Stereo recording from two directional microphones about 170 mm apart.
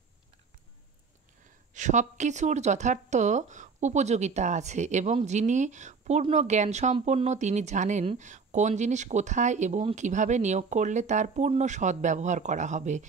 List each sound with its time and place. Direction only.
1.7 s speech: 45° right (ahead or behind)